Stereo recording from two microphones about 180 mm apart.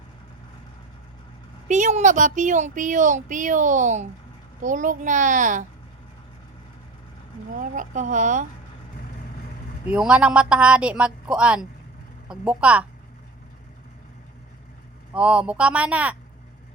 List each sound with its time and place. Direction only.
1.6 s speech: 45° right (ahead or behind)
7.6 s speech: 45° right (ahead or behind)
9.9 s a woman's voice: 5° right (ahead or behind)
15.1 s speech: 5° right (ahead or behind)